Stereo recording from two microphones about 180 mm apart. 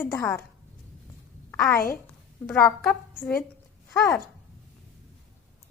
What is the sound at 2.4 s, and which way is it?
Speech, 5° left (ahead or behind).